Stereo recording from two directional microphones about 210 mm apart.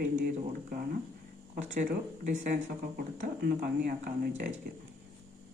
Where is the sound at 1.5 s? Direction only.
40° right (ahead or behind).